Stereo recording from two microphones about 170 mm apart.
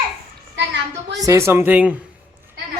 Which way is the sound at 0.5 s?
90° right.